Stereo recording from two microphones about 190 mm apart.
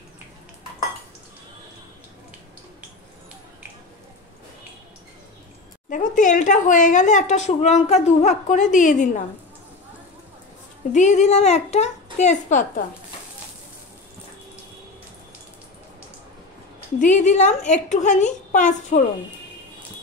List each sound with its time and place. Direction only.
5.9 s speech: 40° left (ahead or behind)
10.9 s speech: 40° left (ahead or behind)
17.0 s speech: 40° left (ahead or behind)